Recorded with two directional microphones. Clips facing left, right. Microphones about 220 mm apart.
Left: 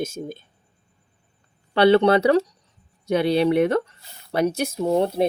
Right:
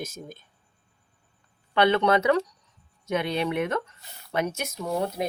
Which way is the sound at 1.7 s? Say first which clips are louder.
Left 6 dB; 35° left (ahead or behind).